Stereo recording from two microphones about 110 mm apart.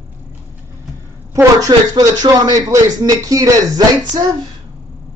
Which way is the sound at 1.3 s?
35° right (ahead or behind).